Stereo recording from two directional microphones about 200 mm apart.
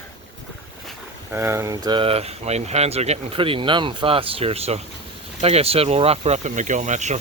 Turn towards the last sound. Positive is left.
turn(degrees=-35)  # may be behind; listen again after turning